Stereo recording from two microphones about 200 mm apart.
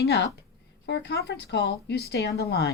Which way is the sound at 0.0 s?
55° left (ahead or behind).